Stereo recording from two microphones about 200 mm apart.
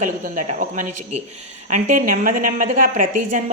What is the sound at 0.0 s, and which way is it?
A woman's voice, 40° right (ahead or behind).